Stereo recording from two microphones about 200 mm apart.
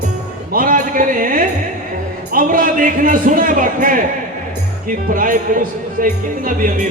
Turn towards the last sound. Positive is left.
turn(degrees=-45)  # may be behind; listen again after turning